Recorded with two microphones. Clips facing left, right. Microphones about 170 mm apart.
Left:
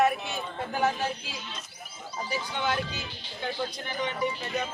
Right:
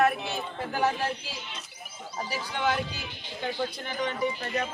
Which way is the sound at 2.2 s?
Centre (ahead or behind).